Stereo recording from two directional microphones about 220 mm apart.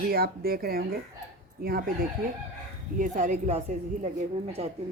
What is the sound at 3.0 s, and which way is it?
Speech, 35° right (ahead or behind).